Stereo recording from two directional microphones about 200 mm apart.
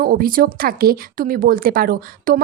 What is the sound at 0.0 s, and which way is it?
Speech, 45° right (ahead or behind).